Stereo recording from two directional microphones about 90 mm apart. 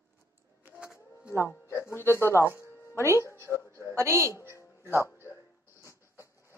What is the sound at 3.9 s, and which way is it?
Speech, 30° right (ahead or behind).